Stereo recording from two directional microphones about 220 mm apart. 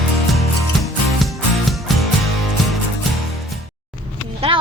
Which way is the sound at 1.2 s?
Centre (ahead or behind).